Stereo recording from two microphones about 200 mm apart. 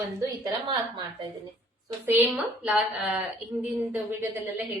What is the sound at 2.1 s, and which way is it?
A woman's voice, 10° right (ahead or behind).